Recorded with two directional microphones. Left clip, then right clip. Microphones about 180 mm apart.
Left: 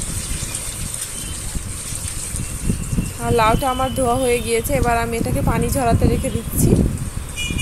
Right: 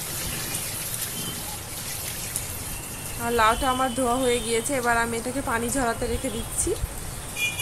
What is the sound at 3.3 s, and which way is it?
Speech, 20° left (ahead or behind).